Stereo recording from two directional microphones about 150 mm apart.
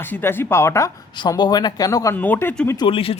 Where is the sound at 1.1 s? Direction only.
30° left (ahead or behind); by 2.8 s 10° left (ahead or behind).